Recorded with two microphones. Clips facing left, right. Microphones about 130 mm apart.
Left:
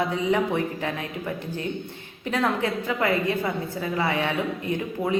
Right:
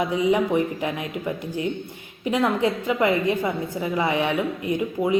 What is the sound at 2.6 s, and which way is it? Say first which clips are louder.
A woman's voice: right 4 dB; 20° right (ahead or behind).